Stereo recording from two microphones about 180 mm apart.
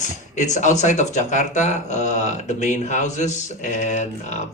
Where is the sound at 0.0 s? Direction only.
40° left (ahead or behind).